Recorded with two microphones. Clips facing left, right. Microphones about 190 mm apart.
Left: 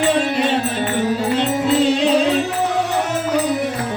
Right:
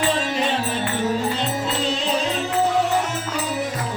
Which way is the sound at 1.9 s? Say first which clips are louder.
Left 8 dB; 65° left (ahead or behind).